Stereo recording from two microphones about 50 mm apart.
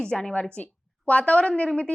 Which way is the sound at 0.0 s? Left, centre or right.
Centre.